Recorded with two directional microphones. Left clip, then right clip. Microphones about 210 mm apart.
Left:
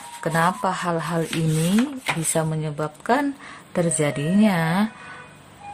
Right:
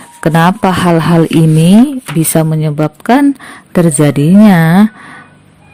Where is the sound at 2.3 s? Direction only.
35° right (ahead or behind).